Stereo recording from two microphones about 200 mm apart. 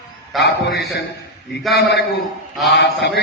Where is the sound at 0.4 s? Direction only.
55° left (ahead or behind).